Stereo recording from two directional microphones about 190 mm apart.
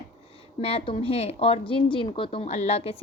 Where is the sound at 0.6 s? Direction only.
30° left (ahead or behind).